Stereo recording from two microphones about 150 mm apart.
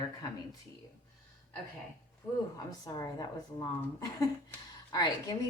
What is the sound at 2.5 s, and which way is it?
Speech, 25° left (ahead or behind).